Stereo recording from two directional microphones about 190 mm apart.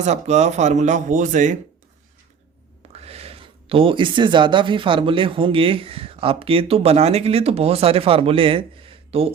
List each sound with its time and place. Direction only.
0.0 s speech: 35° right (ahead or behind)
2.9 s speech: 35° right (ahead or behind)